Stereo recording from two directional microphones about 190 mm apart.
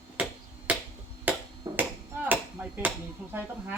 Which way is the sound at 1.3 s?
10° right (ahead or behind).